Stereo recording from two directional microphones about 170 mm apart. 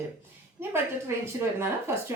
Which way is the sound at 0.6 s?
15° right (ahead or behind).